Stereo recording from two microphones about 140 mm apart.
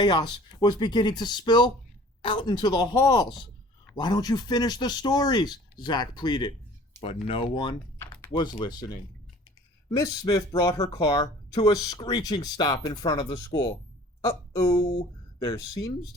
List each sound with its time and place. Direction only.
0.0 s speech: 30° left (ahead or behind)
7.0 s speech: 40° left (ahead or behind)
10.0 s a woman's voice: 25° left (ahead or behind)
14.7 s speech: 40° left (ahead or behind)